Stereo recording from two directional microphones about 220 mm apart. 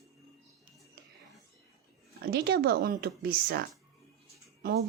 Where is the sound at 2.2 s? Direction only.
45° right (ahead or behind).